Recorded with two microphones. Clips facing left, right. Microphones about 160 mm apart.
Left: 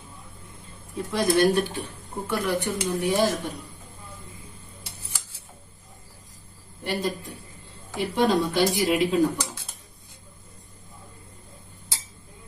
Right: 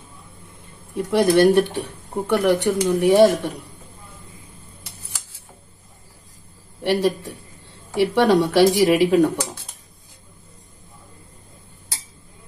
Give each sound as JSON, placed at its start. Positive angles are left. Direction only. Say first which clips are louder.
{"t": 1.1, "sound": "speech", "louder": "right 6 dB", "side_deg": -65}
{"t": 6.8, "sound": "speech", "louder": "right 8 dB", "side_deg": -70}